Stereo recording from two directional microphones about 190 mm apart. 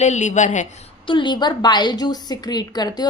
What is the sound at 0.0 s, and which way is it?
A woman's voice, 40° left (ahead or behind).